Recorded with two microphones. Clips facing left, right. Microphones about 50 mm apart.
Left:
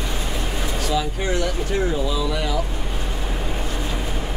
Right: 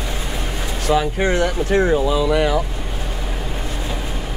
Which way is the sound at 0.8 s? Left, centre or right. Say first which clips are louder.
Right 7 dB; right.